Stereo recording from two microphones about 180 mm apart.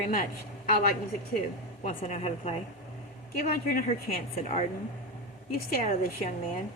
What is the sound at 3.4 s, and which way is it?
Speech, 55° left (ahead or behind).